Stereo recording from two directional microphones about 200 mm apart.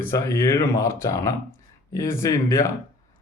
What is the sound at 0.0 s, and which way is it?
Speech, 15° left (ahead or behind).